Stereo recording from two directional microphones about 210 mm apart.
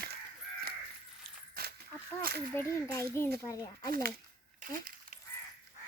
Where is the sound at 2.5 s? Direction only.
15° left (ahead or behind).